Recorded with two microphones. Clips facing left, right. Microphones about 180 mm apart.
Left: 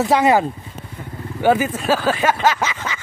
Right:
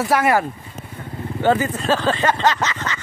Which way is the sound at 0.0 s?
20° left (ahead or behind).